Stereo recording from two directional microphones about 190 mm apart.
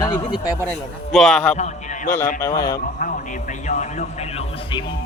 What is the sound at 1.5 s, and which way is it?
Speech, 40° left (ahead or behind).